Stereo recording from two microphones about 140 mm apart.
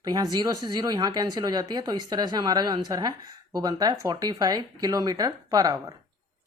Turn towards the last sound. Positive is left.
turn(degrees=-25)  # may be behind; listen again after turning